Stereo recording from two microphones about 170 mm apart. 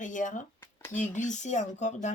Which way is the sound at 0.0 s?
50° left (ahead or behind).